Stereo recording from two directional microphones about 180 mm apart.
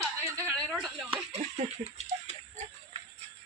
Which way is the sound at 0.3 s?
15° right (ahead or behind).